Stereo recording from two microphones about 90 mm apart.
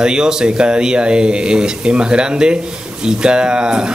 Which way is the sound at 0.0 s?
10° right (ahead or behind).